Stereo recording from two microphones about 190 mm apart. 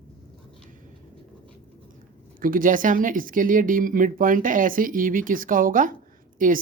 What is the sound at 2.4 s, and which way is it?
Speech, 45° right (ahead or behind).